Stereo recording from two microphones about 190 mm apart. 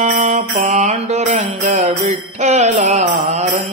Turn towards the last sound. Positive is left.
turn(degrees=-35)  # may be behind; listen again after turning